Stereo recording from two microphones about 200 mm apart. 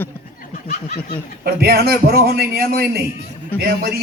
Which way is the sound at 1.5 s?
50° right (ahead or behind).